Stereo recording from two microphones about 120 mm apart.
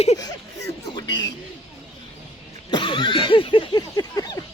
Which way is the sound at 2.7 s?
45° left (ahead or behind).